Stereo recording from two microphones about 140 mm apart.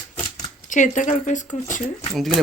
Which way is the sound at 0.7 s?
60° left (ahead or behind).